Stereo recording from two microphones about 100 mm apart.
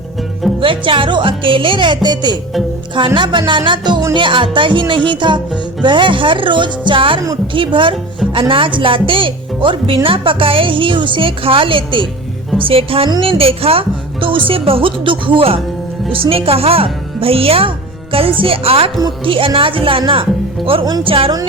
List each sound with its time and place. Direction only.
0.6 s speech: 60° right (ahead or behind)
3.2 s music: 55° right (ahead or behind)
4.1 s speech: 55° right (ahead or behind)
5.0 s music: 50° right (ahead or behind)
5.8 s speech: 55° right (ahead or behind); by 18.9 s 70° right (ahead or behind)
19.2 s speech: 60° right (ahead or behind)
21.0 s speech: 60° right (ahead or behind)